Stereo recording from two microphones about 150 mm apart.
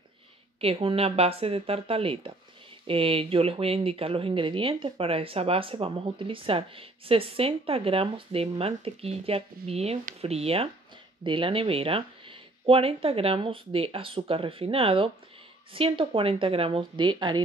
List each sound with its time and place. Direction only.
0.6 s speech: 40° right (ahead or behind)